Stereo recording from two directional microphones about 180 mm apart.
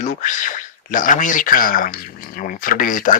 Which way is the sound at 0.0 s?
45° left (ahead or behind).